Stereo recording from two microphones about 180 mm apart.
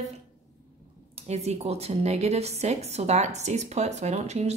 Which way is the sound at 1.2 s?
35° right (ahead or behind).